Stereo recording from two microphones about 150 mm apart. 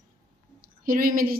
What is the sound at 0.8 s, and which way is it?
Speech, 70° right (ahead or behind).